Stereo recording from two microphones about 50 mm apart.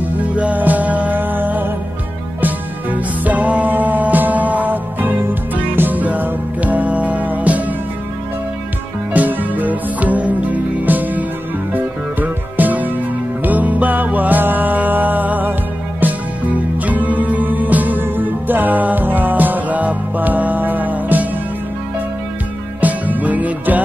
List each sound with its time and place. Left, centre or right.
0.4 s music: right
9.1 s music: right
22.8 s music: right